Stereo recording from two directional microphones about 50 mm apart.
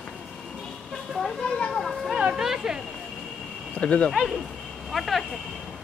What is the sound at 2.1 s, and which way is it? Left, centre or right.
Speech, centre.